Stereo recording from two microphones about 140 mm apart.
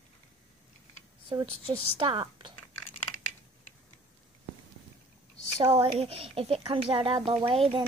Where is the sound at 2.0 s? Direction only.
40° right (ahead or behind).